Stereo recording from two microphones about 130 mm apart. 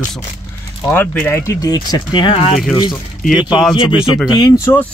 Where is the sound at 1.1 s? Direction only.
15° left (ahead or behind); by 2.5 s 45° left (ahead or behind).